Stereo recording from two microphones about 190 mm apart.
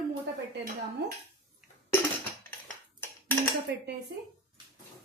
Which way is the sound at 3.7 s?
65° right (ahead or behind).